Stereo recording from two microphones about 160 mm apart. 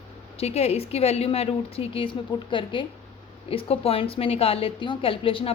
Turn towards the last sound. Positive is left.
turn(degrees=35)  # may be behind; listen again after turning